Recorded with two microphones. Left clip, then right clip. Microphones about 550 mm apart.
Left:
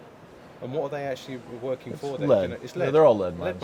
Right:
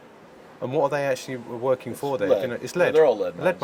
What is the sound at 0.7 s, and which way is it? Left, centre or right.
Speech, right.